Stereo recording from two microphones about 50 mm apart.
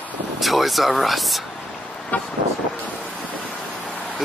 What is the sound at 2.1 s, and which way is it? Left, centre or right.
Speech, left.